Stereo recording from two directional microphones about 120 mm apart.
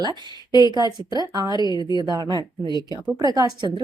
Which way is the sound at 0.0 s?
35° right (ahead or behind).